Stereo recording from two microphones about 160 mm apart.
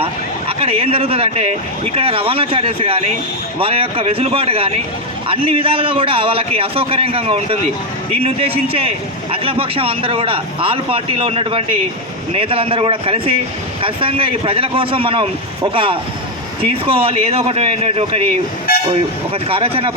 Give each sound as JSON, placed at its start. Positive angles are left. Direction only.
{"t": 0.0, "sound": "a man's voice", "side_deg": -35}
{"t": 18.7, "sound": "toot", "side_deg": 70}
{"t": 19.3, "sound": "a man's voice", "side_deg": -35}